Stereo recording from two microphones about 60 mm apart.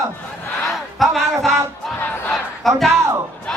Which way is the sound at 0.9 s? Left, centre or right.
Centre.